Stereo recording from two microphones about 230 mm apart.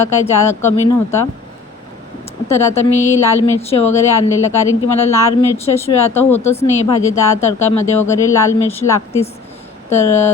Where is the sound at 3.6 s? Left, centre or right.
Left.